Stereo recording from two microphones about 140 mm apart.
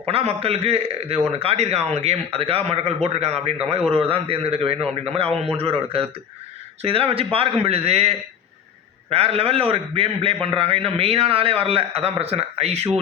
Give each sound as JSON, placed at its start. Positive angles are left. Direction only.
{"t": 0.1, "sound": "a man's voice", "side_deg": -45}